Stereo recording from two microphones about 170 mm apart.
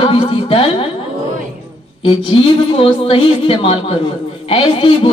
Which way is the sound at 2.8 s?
30° left (ahead or behind).